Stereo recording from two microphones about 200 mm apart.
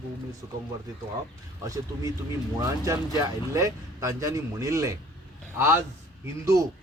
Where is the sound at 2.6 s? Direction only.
15° right (ahead or behind).